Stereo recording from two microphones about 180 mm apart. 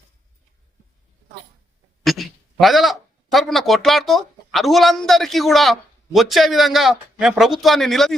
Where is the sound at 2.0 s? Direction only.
Centre (ahead or behind).